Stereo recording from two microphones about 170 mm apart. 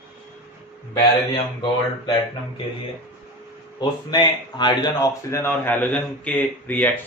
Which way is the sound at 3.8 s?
25° left (ahead or behind).